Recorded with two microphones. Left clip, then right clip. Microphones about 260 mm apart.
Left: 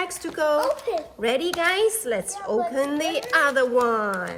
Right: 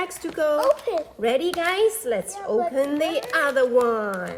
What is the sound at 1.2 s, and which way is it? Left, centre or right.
A woman's voice, left.